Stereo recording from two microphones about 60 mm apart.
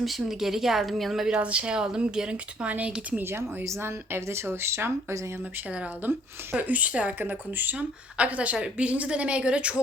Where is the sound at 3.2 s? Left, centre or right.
Right.